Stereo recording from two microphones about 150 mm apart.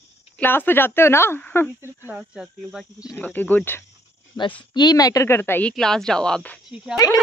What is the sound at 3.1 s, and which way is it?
Speech, 10° left (ahead or behind).